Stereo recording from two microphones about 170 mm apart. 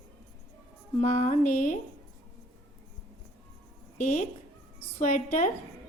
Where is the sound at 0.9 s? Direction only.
40° left (ahead or behind).